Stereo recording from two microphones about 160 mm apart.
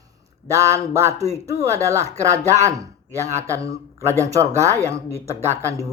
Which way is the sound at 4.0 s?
15° right (ahead or behind).